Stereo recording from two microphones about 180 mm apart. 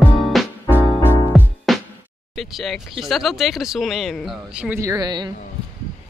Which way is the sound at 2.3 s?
Centre (ahead or behind).